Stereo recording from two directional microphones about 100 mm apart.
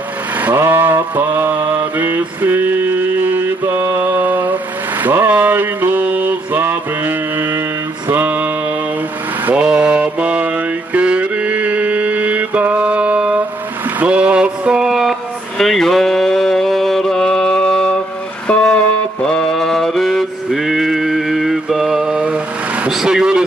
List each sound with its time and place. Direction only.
0.4 s mantra: 20° right (ahead or behind)
13.8 s a sound: 15° right (ahead or behind); by 17.9 s 10° left (ahead or behind)
18.5 s music: 5° left (ahead or behind)
19.2 s mantra: 5° left (ahead or behind)